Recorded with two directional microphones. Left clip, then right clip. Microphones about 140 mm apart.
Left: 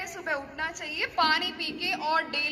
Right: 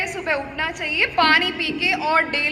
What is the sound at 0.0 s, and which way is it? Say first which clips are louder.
A woman's voice: right 9 dB; 40° left (ahead or behind).